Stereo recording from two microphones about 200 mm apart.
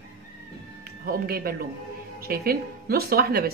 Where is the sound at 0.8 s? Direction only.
45° right (ahead or behind).